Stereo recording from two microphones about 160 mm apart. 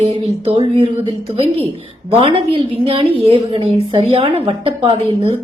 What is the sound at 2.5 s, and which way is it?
A woman's voice, 35° right (ahead or behind).